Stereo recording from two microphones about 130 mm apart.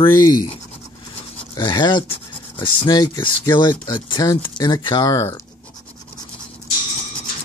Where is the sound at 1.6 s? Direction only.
35° left (ahead or behind).